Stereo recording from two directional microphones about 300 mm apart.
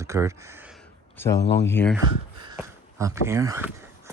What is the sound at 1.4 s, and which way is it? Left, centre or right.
Speech, left.